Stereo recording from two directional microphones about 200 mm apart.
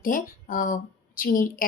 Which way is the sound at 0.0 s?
45° left (ahead or behind).